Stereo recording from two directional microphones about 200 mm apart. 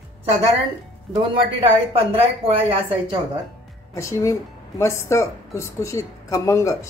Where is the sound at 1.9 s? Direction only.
30° right (ahead or behind).